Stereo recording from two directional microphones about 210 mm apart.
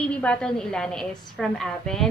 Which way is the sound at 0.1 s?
5° left (ahead or behind).